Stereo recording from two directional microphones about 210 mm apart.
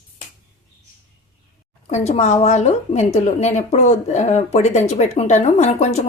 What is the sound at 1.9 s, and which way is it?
A woman's voice, 30° left (ahead or behind).